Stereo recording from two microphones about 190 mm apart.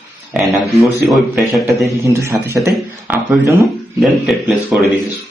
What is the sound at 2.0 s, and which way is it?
A man's voice, 15° right (ahead or behind).